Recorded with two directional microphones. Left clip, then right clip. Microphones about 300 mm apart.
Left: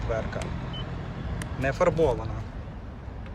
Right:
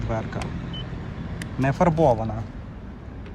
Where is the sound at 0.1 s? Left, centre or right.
Centre.